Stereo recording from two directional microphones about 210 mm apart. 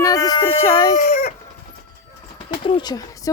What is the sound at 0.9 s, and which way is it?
Chicken, 40° left (ahead or behind).